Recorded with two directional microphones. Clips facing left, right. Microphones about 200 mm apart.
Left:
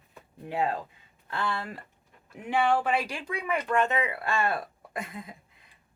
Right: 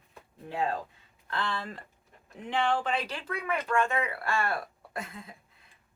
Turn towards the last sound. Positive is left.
turn(degrees=15)  # may be behind; listen again after turning